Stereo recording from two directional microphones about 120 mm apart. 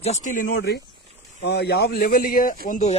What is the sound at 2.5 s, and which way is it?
Speech, 80° left.